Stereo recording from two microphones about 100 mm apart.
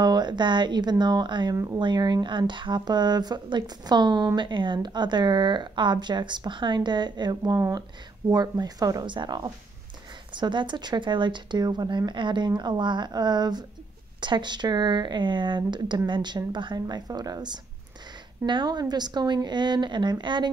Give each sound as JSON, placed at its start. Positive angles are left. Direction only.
{"t": 0.0, "sound": "speech", "side_deg": -45}
{"t": 1.5, "sound": "speech", "side_deg": -35}
{"t": 1.8, "sound": "speech", "side_deg": -50}
{"t": 9.1, "sound": "speech", "side_deg": -50}